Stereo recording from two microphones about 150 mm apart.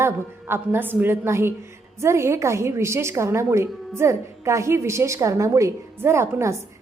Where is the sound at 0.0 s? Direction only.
15° right (ahead or behind).